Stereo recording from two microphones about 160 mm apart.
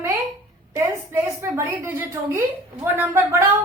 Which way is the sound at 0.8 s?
15° right (ahead or behind).